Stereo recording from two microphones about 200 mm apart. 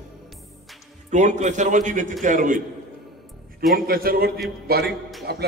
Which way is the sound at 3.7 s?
50° right (ahead or behind).